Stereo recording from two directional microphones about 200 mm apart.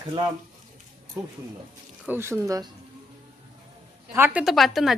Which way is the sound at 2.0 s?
10° right (ahead or behind).